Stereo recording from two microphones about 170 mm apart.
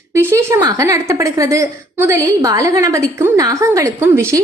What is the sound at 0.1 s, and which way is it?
A woman's voice, 15° right (ahead or behind).